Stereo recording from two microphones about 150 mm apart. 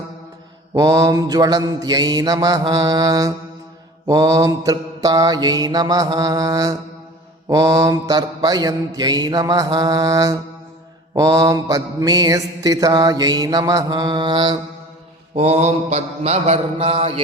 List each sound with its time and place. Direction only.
0.7 s mantra: 25° right (ahead or behind)
15.4 s mantra: 45° right (ahead or behind)